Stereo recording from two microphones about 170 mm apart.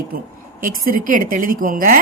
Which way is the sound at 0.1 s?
65° right (ahead or behind).